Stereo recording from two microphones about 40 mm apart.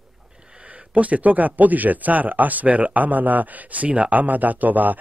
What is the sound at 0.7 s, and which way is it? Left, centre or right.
Speech, right.